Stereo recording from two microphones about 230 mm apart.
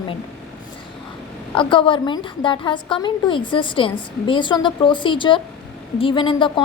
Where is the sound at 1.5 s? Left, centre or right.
Left.